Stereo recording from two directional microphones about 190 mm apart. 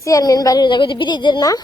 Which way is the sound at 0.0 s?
20° left (ahead or behind).